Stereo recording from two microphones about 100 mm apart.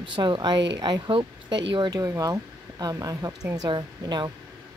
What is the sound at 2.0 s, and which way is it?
Speech, 35° right (ahead or behind).